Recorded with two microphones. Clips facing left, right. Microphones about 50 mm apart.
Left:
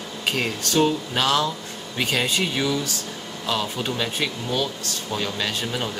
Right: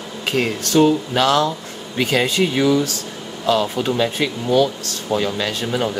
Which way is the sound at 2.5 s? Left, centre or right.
Right.